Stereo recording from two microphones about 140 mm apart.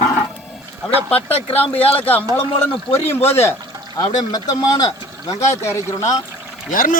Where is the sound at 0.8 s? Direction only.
10° left (ahead or behind).